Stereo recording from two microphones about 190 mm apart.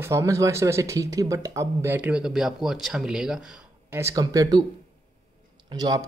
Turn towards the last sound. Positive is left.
turn(degrees=-20)  # may be behind; listen again after turning